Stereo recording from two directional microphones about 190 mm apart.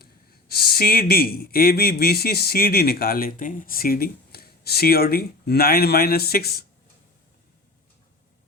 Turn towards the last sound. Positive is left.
turn(degrees=55)  # may be behind; listen again after turning